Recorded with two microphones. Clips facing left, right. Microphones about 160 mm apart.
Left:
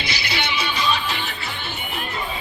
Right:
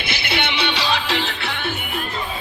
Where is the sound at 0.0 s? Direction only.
55° right (ahead or behind).